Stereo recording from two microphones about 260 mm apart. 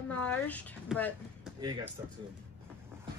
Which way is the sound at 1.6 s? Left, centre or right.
Centre.